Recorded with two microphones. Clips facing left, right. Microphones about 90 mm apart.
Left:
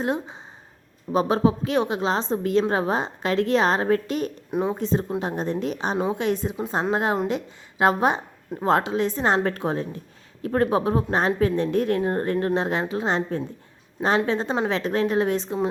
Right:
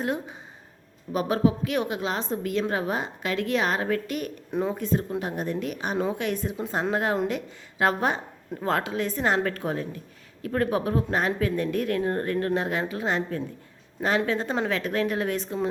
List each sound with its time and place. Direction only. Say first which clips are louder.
0.0 s a woman's voice: left 3 dB; 25° left (ahead or behind)